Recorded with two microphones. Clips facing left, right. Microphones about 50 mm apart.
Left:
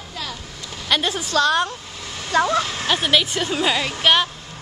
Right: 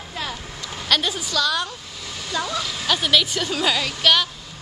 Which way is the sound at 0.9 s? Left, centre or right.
Centre.